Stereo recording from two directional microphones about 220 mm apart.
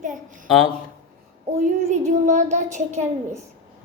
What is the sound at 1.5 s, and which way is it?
A child's voice, 30° right (ahead or behind).